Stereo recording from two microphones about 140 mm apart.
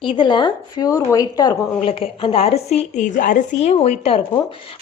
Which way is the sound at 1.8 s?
40° left (ahead or behind).